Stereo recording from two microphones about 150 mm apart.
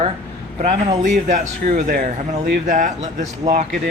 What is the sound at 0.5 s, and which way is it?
Speech, 50° right (ahead or behind).